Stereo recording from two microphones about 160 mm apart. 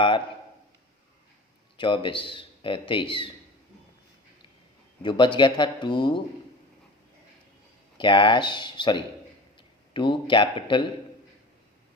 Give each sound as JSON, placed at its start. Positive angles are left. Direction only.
{"t": 1.8, "sound": "speech", "side_deg": 30}
{"t": 5.0, "sound": "speech", "side_deg": 30}
{"t": 7.9, "sound": "a man's voice", "side_deg": 30}